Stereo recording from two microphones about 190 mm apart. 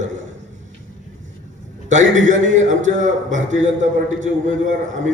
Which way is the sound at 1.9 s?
40° right (ahead or behind).